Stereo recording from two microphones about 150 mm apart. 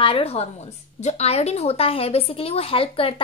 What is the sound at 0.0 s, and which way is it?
A woman's voice, 40° left (ahead or behind).